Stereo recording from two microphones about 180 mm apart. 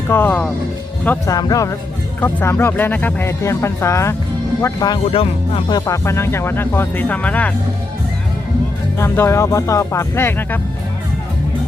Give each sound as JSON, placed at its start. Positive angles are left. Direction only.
{"t": 0.1, "sound": "speech", "side_deg": 10}
{"t": 5.1, "sound": "speech", "side_deg": 30}
{"t": 9.0, "sound": "speech", "side_deg": 15}